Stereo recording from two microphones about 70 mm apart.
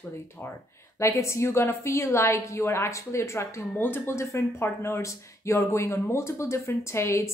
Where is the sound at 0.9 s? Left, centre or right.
Left.